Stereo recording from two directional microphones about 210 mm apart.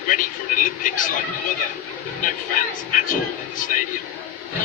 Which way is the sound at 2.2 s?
40° left (ahead or behind).